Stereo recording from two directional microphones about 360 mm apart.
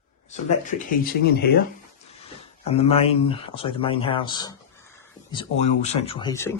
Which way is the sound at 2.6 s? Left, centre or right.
Centre.